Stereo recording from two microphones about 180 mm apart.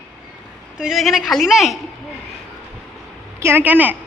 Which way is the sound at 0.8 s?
Centre (ahead or behind).